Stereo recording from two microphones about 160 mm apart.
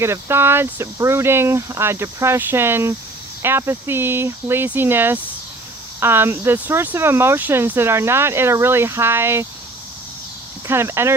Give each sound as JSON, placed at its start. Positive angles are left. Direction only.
{"t": 0.0, "sound": "speech", "side_deg": -15}
{"t": 10.7, "sound": "speech", "side_deg": -15}